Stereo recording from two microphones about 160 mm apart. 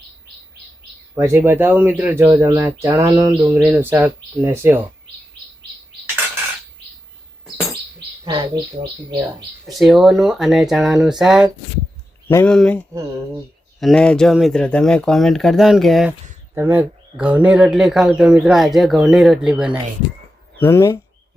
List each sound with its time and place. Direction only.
1.1 s speech: 15° right (ahead or behind)
8.2 s speech: 30° right (ahead or behind)
9.6 s speech: centre (ahead or behind)
12.5 s speech: 5° left (ahead or behind)
16.6 s speech: 10° right (ahead or behind)
20.6 s speech: 15° left (ahead or behind)